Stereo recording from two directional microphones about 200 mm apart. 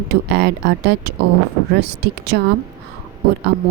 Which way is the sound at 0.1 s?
55° right (ahead or behind).